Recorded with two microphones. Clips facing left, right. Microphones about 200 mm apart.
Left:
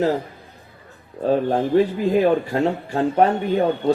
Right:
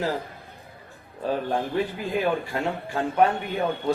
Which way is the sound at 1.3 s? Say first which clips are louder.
Left 8 dB; 35° left (ahead or behind).